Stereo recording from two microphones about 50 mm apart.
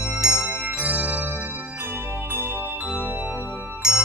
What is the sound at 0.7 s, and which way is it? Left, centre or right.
Organ, right.